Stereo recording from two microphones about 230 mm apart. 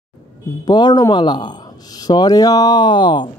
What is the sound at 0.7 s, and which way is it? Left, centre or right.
Speech, centre.